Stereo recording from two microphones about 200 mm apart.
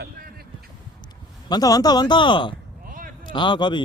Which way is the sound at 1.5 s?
20° left (ahead or behind).